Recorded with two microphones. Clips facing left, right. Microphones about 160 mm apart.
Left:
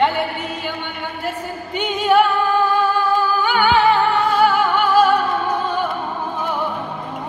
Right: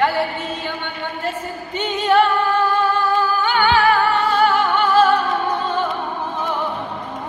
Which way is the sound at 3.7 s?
20° left (ahead or behind).